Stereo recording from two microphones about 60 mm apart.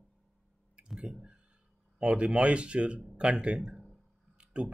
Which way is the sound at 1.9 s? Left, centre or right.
Centre.